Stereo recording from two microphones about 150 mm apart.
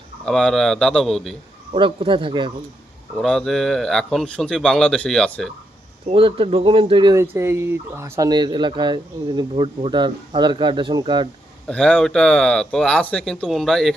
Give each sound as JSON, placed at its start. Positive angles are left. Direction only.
{"t": 0.3, "sound": "speech", "side_deg": 5}
{"t": 1.7, "sound": "speech", "side_deg": -35}
{"t": 3.2, "sound": "speech", "side_deg": 5}
{"t": 6.1, "sound": "speech", "side_deg": -35}
{"t": 8.3, "sound": "speech", "side_deg": -30}
{"t": 11.7, "sound": "speech", "side_deg": 5}